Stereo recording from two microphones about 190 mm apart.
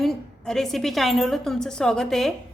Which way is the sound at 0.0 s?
Centre (ahead or behind).